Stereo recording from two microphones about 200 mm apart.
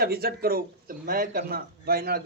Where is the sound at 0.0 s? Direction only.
50° right (ahead or behind).